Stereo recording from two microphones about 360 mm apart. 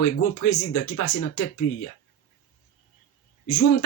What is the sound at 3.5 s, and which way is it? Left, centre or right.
Speech, left.